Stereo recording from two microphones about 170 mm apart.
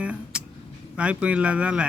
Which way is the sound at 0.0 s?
5° right (ahead or behind).